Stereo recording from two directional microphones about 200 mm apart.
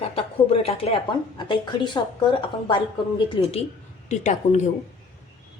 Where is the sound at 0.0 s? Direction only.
30° left (ahead or behind).